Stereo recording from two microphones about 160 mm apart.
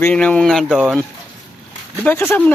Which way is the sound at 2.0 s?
15° left (ahead or behind).